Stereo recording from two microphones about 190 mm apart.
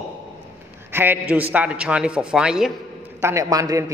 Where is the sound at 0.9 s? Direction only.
10° right (ahead or behind).